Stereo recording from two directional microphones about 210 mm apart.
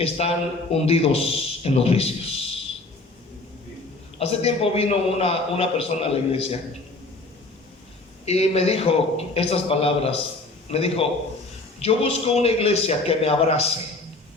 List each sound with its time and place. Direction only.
0.0 s a man's voice: 30° left (ahead or behind)
4.2 s a man's voice: 30° left (ahead or behind)
8.2 s a man's voice: 30° left (ahead or behind)